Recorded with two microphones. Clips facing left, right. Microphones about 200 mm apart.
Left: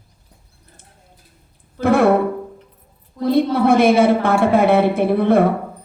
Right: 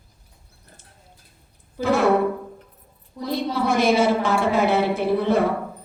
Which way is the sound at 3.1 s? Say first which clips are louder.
Left 8 dB; 55° left (ahead or behind).